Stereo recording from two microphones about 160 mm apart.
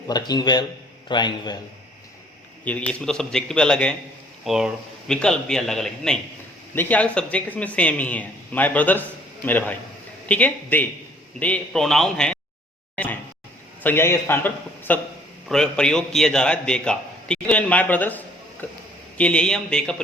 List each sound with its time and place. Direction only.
0.1 s a man's voice: 25° left (ahead or behind)
2.6 s a man's voice: 10° left (ahead or behind)
13.8 s a man's voice: 15° left (ahead or behind)